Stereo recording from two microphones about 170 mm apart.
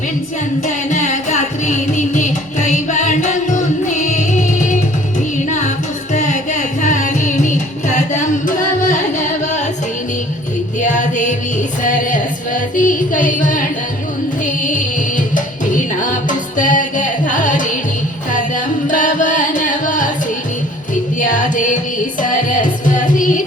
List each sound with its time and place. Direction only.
0.9 s carnatic music: 45° left (ahead or behind)
5.5 s music: 45° left (ahead or behind)
10.8 s music: 45° left (ahead or behind)
18.3 s carnatic music: 50° left (ahead or behind)
21.2 s music: 50° left (ahead or behind)